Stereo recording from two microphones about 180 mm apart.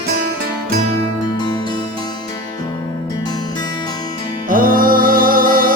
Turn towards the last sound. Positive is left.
turn(degrees=-50)  # may be behind; listen again after turning